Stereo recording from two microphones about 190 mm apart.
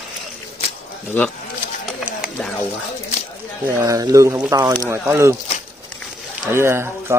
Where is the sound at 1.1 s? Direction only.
10° left (ahead or behind).